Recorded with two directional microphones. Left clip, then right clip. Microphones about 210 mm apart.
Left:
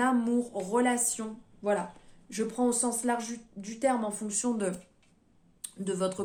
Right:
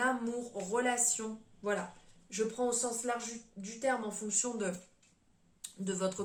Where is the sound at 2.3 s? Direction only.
50° left (ahead or behind).